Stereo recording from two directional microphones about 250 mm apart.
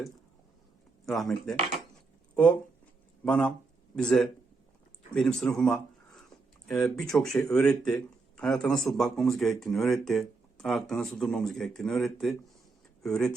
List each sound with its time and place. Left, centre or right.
1.0 s speech: centre
3.2 s speech: centre